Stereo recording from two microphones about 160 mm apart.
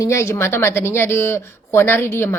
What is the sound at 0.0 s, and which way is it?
Speech, 20° left (ahead or behind).